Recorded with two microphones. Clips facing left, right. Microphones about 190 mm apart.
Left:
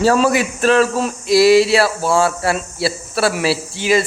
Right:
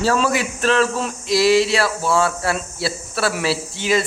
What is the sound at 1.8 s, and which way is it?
Speech, 35° left (ahead or behind).